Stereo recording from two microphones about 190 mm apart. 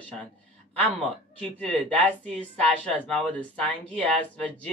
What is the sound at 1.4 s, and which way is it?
Speech, 5° left (ahead or behind).